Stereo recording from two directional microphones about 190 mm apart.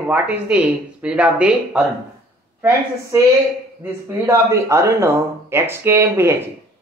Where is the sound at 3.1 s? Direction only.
15° right (ahead or behind).